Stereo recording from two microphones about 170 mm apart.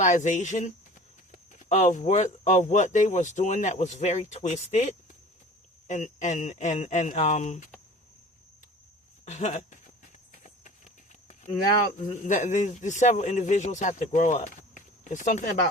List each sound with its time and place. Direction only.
0.0 s speech: 45° left (ahead or behind)
5.9 s speech: 45° left (ahead or behind)
9.2 s speech: 40° left (ahead or behind)
10.4 s a sound: 45° left (ahead or behind)
12.2 s speech: 45° left (ahead or behind)